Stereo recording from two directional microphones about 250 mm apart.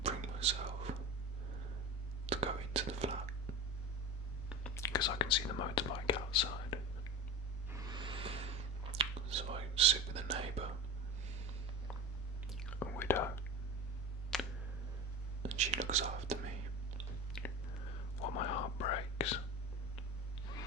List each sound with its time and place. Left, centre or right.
0.0 s whispering: right
2.2 s whispering: right
4.7 s whispering: centre
7.7 s whispering: centre
12.5 s whispering: centre
14.3 s a sound: centre
15.4 s whispering: right
17.3 s whispering: centre
18.3 s whispering: left